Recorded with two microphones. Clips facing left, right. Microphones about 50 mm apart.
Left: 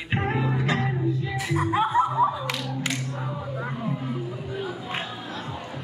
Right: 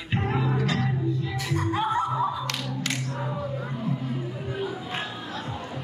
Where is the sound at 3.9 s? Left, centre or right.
Centre.